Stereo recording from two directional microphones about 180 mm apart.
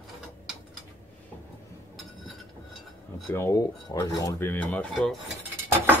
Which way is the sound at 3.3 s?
20° left (ahead or behind).